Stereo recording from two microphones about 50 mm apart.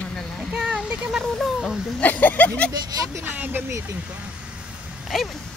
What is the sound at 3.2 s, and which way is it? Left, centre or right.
Speech, right.